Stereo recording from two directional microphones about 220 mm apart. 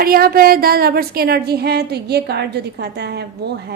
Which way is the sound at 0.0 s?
45° right (ahead or behind).